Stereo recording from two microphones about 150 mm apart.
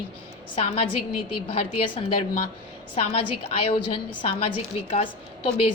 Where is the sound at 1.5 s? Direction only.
40° left (ahead or behind).